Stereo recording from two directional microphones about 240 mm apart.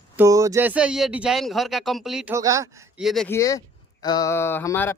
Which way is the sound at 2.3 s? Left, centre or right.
Centre.